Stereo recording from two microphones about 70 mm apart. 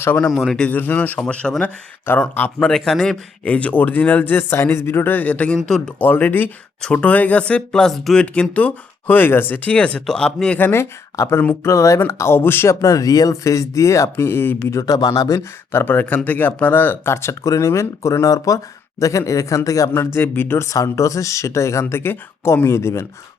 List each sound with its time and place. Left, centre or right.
0.3 s speech: centre
0.7 s speech: left
1.2 s a man's voice: centre
2.0 s speech: left
2.6 s speech: centre
5.5 s speech: centre
6.0 s a man's voice: left
10.6 s speech: left
12.8 s speech: left
14.7 s speech: left
15.4 s speech: left
17.4 s speech: left
20.1 s speech: left
20.7 s speech: left